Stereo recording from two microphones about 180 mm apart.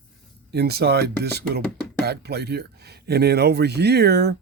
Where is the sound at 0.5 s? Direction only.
65° right (ahead or behind).